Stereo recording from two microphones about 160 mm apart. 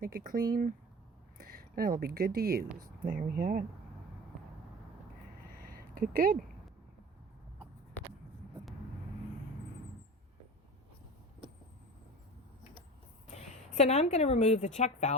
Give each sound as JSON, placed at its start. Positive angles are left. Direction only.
{"t": 0.0, "sound": "speech", "side_deg": -65}
{"t": 5.7, "sound": "a sound", "side_deg": -60}
{"t": 13.7, "sound": "a woman's voice", "side_deg": 45}